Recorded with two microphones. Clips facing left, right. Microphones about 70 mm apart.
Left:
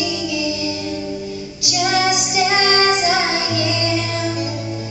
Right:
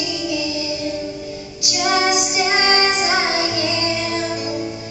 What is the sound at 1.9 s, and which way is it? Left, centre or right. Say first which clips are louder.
Music: even; right.